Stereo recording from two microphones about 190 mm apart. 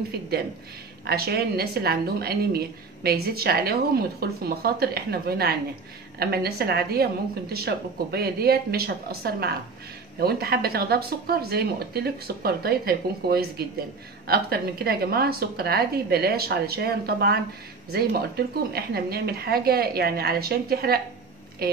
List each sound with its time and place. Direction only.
1.0 s a woman's voice: 55° right (ahead or behind)